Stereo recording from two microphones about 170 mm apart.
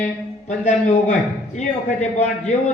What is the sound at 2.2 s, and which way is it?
Speech, 45° left (ahead or behind).